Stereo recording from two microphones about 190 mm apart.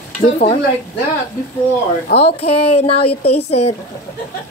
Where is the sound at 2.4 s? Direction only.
30° left (ahead or behind).